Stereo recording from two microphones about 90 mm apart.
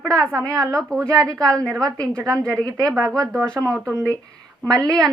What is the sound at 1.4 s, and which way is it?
A woman's voice, 10° left (ahead or behind).